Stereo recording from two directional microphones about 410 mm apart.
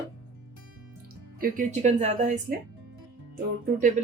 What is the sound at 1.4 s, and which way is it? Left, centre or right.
Speech, centre.